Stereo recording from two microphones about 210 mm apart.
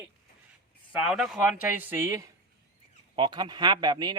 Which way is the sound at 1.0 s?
Centre (ahead or behind).